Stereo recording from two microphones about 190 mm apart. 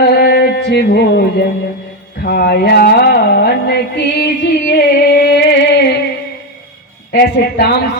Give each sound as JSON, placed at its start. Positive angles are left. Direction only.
{"t": 0.0, "sound": "music", "side_deg": 55}
{"t": 2.2, "sound": "a sound", "side_deg": 55}
{"t": 7.1, "sound": "a man's voice", "side_deg": 60}